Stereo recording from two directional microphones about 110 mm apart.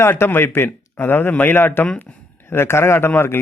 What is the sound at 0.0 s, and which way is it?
A man's voice, 20° left (ahead or behind).